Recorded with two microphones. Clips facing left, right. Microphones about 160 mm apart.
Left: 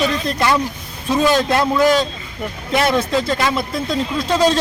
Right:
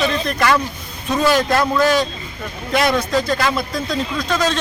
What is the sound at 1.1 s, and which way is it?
A man's voice, 20° left (ahead or behind).